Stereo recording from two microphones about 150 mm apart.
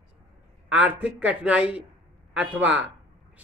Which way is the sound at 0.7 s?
10° right (ahead or behind).